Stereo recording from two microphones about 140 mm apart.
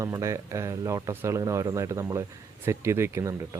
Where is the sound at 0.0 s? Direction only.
20° right (ahead or behind).